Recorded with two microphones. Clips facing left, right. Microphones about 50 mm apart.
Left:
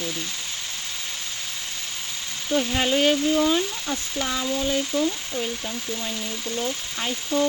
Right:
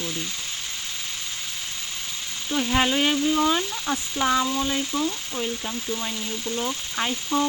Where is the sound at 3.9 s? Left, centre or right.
Right.